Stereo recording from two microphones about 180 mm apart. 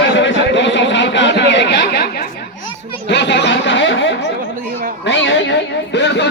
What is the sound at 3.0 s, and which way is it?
Speech, 75° left (ahead or behind).